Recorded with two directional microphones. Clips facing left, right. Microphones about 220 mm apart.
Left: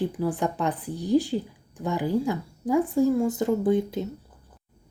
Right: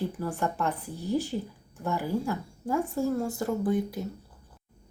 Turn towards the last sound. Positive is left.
turn(degrees=25)  # may be behind; listen again after turning